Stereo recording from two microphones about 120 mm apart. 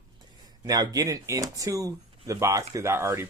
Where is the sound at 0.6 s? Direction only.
30° right (ahead or behind).